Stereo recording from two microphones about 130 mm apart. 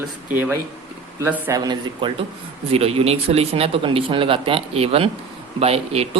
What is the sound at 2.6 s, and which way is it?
Speech, 50° right (ahead or behind).